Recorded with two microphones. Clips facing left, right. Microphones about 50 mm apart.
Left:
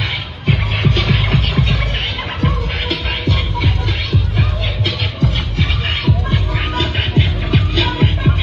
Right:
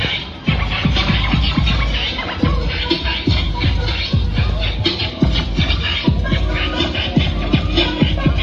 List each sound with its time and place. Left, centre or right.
0.0 s music: centre